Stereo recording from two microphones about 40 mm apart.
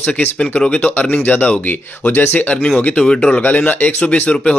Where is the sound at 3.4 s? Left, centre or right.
Left.